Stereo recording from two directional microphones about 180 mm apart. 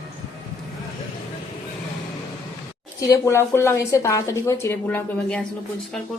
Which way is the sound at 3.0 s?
20° left (ahead or behind).